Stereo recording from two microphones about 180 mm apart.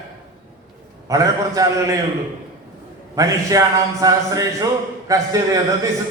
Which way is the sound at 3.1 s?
15° right (ahead or behind).